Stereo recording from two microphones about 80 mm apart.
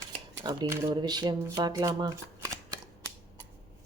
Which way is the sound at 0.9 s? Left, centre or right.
Right.